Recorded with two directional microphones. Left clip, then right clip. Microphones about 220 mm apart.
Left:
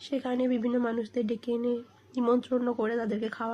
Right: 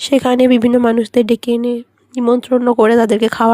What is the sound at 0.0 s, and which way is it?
Speech, 45° right (ahead or behind).